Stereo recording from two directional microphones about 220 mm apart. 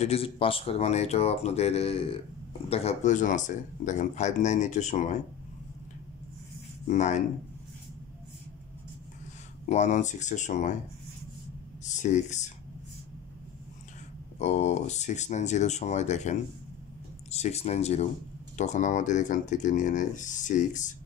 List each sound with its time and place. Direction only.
0.0 s speech: 25° left (ahead or behind)
6.9 s speech: 30° left (ahead or behind)
9.7 s speech: 30° left (ahead or behind)
11.8 s speech: 35° left (ahead or behind)
14.4 s speech: 30° left (ahead or behind)